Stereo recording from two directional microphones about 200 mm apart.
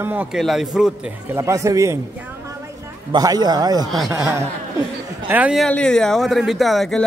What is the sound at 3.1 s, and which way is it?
A man's voice, 20° right (ahead or behind).